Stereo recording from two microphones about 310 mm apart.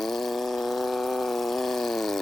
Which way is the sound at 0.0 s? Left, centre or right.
Centre.